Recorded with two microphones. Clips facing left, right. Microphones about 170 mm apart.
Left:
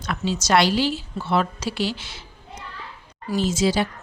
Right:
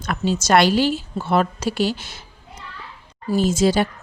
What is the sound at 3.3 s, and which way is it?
Speech, 50° right (ahead or behind).